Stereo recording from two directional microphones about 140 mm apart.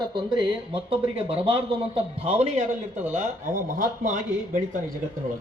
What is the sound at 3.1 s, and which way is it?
Speech, 65° right (ahead or behind).